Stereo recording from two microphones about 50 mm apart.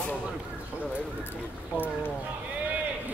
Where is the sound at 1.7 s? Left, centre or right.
Left.